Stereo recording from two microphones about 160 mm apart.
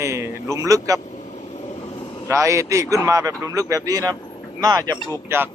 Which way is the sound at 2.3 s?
20° right (ahead or behind).